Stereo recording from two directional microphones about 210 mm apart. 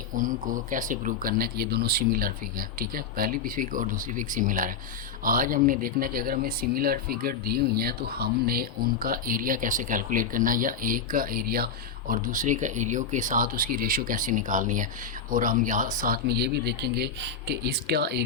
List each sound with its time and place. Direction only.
0.2 s speech: 40° right (ahead or behind)